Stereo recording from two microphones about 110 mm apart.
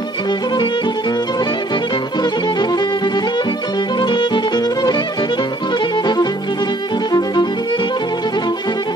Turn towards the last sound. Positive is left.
turn(degrees=40)  # may be behind; listen again after turning